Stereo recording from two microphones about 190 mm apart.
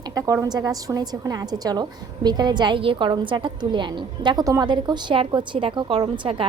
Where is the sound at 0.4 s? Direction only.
20° right (ahead or behind).